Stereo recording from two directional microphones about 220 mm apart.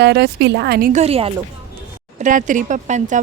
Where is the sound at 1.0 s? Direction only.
25° right (ahead or behind).